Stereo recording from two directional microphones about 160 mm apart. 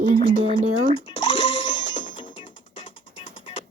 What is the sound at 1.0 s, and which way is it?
Music, 30° left (ahead or behind).